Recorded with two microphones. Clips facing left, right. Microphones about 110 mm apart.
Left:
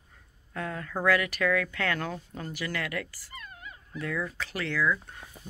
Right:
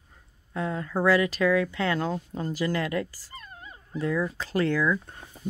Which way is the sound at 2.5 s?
35° right (ahead or behind).